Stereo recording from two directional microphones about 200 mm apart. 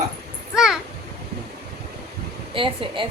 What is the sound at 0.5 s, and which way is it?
Speech, 5° right (ahead or behind).